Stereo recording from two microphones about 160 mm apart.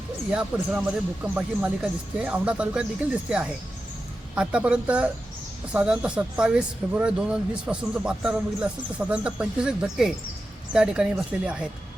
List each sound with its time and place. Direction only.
0.5 s speech: 10° right (ahead or behind)